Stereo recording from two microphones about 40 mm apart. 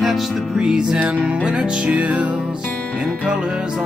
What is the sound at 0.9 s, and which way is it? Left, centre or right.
Music, right.